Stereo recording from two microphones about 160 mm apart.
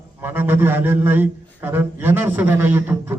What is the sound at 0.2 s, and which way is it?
Speech, 15° right (ahead or behind).